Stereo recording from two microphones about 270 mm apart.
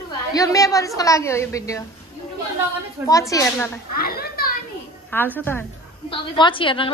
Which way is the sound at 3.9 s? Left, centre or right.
Left.